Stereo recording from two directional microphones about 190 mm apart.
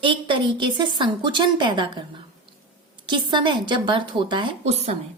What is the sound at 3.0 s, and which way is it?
A woman's voice, 25° right (ahead or behind).